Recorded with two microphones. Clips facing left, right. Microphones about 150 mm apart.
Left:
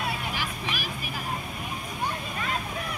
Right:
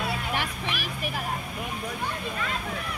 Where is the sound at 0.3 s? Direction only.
60° right (ahead or behind).